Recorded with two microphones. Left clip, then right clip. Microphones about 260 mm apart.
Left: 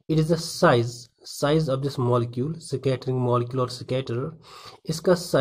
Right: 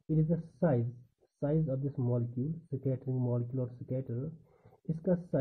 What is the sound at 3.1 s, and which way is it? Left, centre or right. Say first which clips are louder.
Speech: left 14 dB; left.